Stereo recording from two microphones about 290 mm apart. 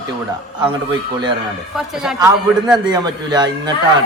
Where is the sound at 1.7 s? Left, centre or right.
Centre.